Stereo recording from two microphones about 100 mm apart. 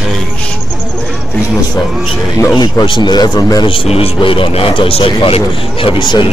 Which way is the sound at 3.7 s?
70° left (ahead or behind).